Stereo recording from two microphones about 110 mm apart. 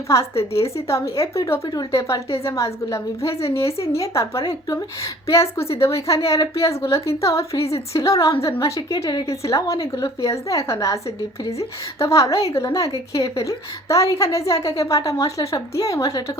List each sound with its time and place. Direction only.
0.1 s a woman's voice: 30° left (ahead or behind)
1.6 s a woman's voice: 40° left (ahead or behind)
1.9 s a woman's voice: 25° left (ahead or behind)